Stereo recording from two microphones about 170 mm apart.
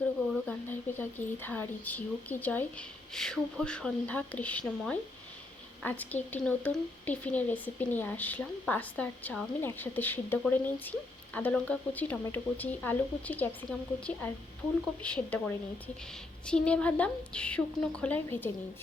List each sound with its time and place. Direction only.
0.4 s a woman's voice: 10° left (ahead or behind)